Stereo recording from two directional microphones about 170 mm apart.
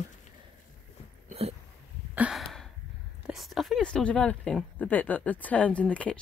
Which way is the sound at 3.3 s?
Centre (ahead or behind).